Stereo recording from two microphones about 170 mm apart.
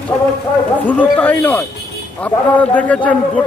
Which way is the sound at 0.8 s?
10° left (ahead or behind).